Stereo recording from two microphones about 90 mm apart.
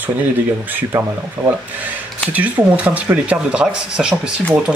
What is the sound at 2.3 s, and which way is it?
Speech, 15° right (ahead or behind).